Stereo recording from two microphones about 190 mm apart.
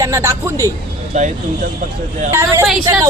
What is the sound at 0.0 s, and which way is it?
Speech, 15° right (ahead or behind).